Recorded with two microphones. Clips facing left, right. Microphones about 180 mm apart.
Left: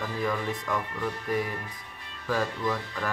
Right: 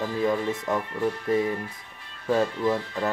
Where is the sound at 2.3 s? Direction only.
25° right (ahead or behind).